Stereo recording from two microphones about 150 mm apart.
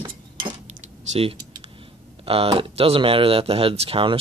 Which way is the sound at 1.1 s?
40° right (ahead or behind).